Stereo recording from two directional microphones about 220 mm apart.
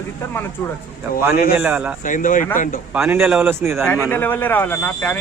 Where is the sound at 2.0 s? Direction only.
35° left (ahead or behind).